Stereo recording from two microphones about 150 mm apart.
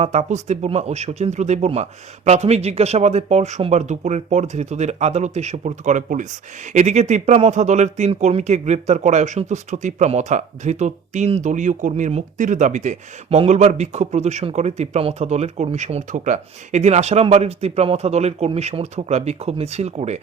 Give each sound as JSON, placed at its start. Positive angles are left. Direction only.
{"t": 0.0, "sound": "speech", "side_deg": -45}